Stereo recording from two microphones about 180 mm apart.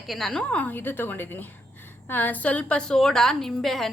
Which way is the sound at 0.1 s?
Centre (ahead or behind).